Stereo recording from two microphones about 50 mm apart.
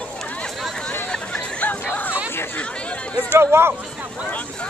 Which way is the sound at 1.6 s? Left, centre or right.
Left.